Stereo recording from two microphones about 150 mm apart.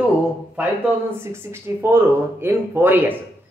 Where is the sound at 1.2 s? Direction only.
15° right (ahead or behind).